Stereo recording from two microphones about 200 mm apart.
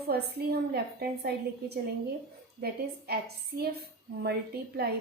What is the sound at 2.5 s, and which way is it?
A woman's voice, 55° right (ahead or behind).